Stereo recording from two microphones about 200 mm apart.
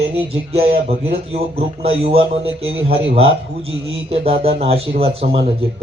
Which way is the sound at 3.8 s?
30° right (ahead or behind).